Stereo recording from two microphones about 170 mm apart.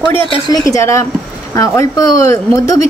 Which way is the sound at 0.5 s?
20° left (ahead or behind).